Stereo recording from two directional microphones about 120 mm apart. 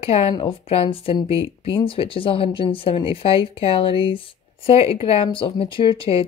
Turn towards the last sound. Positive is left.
turn(degrees=45)  # may be behind; listen again after turning